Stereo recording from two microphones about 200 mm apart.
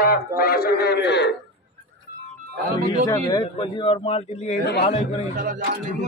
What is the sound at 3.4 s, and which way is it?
A man's voice, 25° left (ahead or behind).